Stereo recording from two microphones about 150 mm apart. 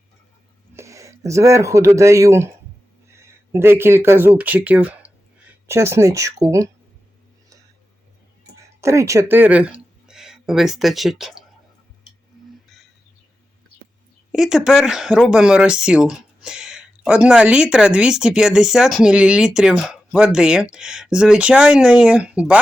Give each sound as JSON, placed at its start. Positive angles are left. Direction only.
{"t": 0.8, "sound": "speech", "side_deg": -20}
{"t": 3.5, "sound": "speech", "side_deg": -15}
{"t": 8.8, "sound": "speech", "side_deg": -20}
{"t": 14.3, "sound": "speech", "side_deg": -5}